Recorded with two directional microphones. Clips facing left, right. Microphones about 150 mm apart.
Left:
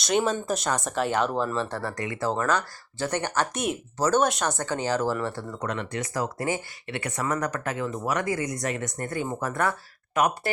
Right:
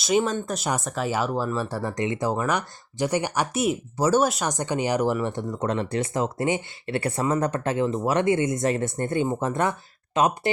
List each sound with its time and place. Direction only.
0.0 s speech: 5° right (ahead or behind)
4.5 s speech: 15° right (ahead or behind)